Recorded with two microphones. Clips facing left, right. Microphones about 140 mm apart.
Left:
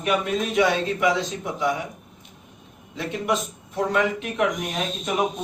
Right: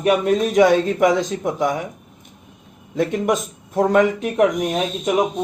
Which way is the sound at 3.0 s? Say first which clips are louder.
Right 6 dB; 45° right (ahead or behind).